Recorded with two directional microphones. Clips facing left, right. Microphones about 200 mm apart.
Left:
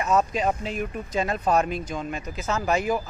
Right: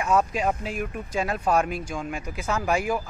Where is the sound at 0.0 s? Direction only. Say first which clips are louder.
Even; 10° right (ahead or behind).